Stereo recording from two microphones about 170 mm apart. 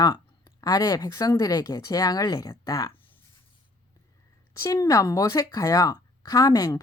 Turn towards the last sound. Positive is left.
turn(degrees=20)  # may be behind; listen again after turning